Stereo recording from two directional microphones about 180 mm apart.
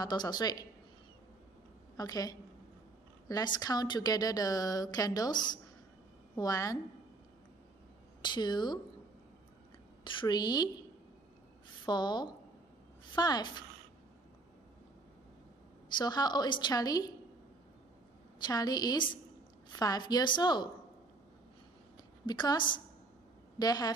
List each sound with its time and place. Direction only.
0.0 s a woman's voice: 25° left (ahead or behind)
2.0 s a woman's voice: 20° left (ahead or behind)
8.2 s a woman's voice: 25° left (ahead or behind)
10.0 s a woman's voice: 25° left (ahead or behind)
11.8 s a woman's voice: 25° left (ahead or behind)
16.0 s a woman's voice: 25° left (ahead or behind)
18.4 s a woman's voice: 20° left (ahead or behind)
22.2 s a woman's voice: 25° left (ahead or behind)